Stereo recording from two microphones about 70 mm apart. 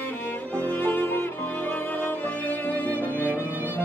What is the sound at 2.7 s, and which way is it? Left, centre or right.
Music, left.